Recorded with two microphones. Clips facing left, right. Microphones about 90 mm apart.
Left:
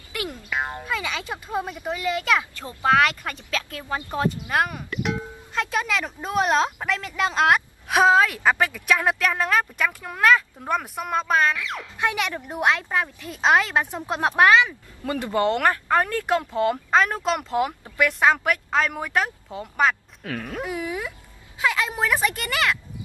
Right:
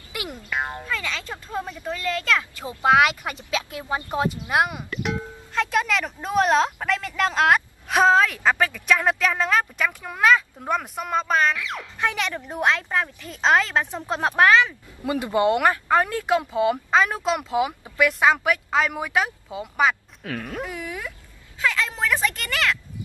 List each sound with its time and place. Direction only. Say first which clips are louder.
0.1 s music: left 2 dB; 15° right (ahead or behind)
0.5 s music: right 1 dB; centre (ahead or behind)
0.8 s speech: left 1 dB; 15° left (ahead or behind)
2.6 s speech: right 3 dB; 15° right (ahead or behind)
4.8 s speech: left 1 dB; centre (ahead or behind)
15.0 s speech: right 2 dB; 10° right (ahead or behind); by 22.8 s 15° left (ahead or behind)